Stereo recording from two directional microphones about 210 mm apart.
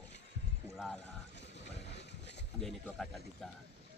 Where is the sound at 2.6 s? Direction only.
5° left (ahead or behind).